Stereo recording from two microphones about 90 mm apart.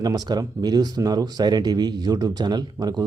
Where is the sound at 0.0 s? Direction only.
45° right (ahead or behind).